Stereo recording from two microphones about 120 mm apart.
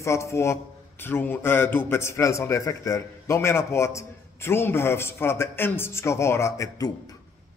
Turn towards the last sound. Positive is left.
turn(degrees=30)  # may be behind; listen again after turning